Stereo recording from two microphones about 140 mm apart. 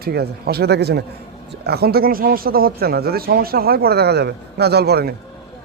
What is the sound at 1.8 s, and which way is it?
Speech, 90° right.